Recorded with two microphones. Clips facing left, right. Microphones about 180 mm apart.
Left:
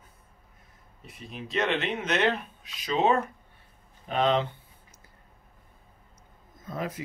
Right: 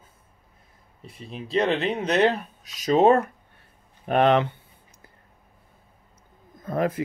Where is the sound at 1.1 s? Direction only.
30° right (ahead or behind).